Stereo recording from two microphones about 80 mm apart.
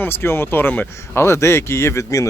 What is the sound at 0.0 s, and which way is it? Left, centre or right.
Speech, left.